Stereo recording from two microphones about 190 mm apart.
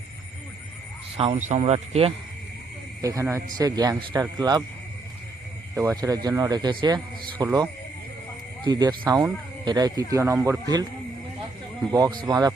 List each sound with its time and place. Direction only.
1.1 s speech: 35° right (ahead or behind)
3.0 s speech: 15° right (ahead or behind)
5.7 s speech: 15° right (ahead or behind)
11.9 s speech: 20° right (ahead or behind)